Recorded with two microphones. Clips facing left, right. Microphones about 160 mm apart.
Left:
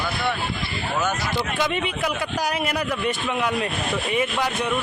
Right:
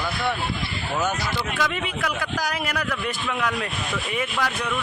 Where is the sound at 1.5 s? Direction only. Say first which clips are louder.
Left 2 dB; 25° left (ahead or behind).